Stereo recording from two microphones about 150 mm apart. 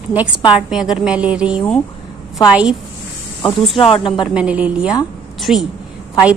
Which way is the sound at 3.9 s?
35° left (ahead or behind).